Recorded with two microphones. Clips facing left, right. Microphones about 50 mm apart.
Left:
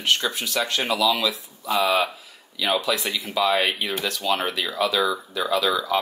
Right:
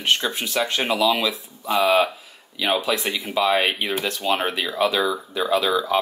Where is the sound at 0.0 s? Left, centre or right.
Right.